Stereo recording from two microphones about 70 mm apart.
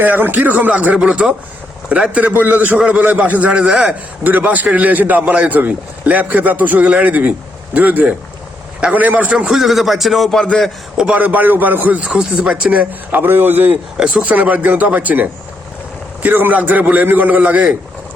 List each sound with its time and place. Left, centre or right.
0.0 s a man's voice: right; by 3.9 s centre
4.2 s a man's voice: right
9.5 s speech: centre
10.9 s speech: centre
11.2 s a man's voice: right
12.0 s a man's voice: centre
13.9 s speech: centre
14.3 s a man's voice: right